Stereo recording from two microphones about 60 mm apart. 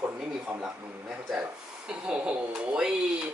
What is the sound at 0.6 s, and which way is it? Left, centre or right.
A man's voice, centre.